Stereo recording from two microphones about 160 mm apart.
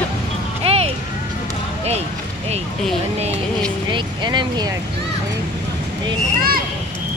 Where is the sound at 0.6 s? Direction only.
40° right (ahead or behind).